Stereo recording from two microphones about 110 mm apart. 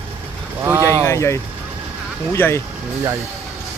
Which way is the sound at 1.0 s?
25° left (ahead or behind).